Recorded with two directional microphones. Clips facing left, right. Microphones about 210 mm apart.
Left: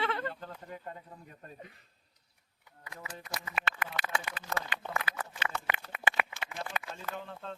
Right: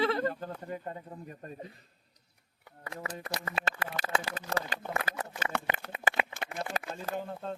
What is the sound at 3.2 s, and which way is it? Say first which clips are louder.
Speech: right 5 dB; 65° right (ahead or behind).